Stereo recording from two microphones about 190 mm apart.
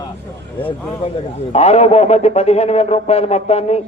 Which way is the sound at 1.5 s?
35° left (ahead or behind).